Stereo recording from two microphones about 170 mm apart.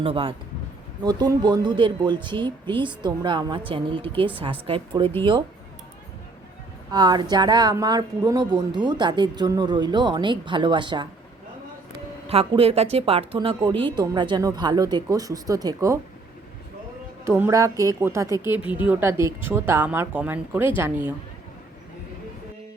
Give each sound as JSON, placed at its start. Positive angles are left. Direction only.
{"t": 0.0, "sound": "speech", "side_deg": -30}
{"t": 6.9, "sound": "speech", "side_deg": -25}
{"t": 12.3, "sound": "speech", "side_deg": -35}
{"t": 17.2, "sound": "speech", "side_deg": -15}